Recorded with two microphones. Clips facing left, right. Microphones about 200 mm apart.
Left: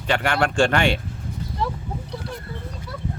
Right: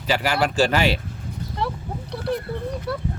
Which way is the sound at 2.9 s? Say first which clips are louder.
Right 9 dB; 70° right (ahead or behind).